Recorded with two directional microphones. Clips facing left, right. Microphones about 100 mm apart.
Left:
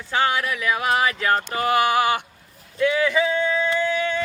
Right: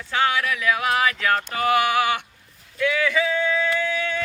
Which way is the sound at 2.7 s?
35° left (ahead or behind).